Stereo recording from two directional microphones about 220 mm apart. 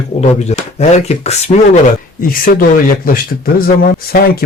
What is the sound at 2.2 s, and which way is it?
Speech, 40° left (ahead or behind).